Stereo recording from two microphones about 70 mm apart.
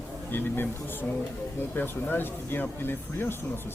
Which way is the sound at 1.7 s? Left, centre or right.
Left.